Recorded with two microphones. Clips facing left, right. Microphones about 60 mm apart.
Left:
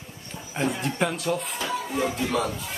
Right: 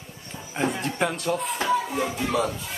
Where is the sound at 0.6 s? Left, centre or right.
Centre.